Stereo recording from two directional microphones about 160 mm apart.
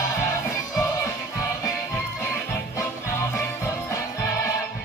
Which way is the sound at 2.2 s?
15° left (ahead or behind).